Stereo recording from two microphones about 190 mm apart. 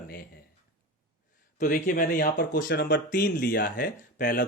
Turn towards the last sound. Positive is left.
turn(degrees=50)  # may be behind; listen again after turning